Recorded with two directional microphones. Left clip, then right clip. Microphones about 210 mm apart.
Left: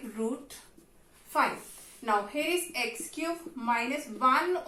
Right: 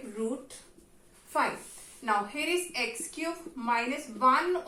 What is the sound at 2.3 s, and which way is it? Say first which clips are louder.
A woman's voice: even; 10° right (ahead or behind).